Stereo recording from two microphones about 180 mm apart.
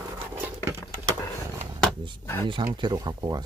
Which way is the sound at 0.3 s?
10° right (ahead or behind).